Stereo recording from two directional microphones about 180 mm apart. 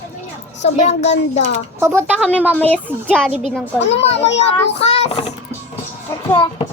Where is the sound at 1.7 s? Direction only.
15° right (ahead or behind).